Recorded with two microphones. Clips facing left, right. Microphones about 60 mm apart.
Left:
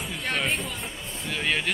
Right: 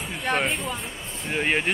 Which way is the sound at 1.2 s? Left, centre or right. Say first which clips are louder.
Right 3 dB; right.